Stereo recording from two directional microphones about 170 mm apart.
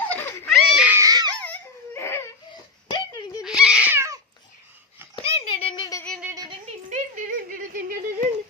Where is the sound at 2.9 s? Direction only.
25° left (ahead or behind).